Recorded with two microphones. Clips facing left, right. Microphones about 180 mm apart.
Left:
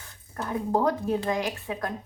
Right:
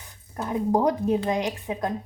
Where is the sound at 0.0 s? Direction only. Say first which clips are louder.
Right 2 dB; 20° right (ahead or behind).